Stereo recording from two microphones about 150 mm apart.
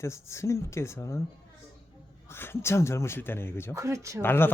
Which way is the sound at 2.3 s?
15° left (ahead or behind).